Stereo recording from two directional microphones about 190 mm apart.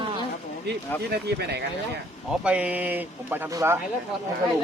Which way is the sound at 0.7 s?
60° right (ahead or behind).